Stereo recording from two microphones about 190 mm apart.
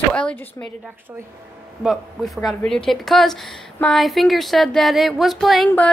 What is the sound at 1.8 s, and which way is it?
A woman's voice, centre (ahead or behind).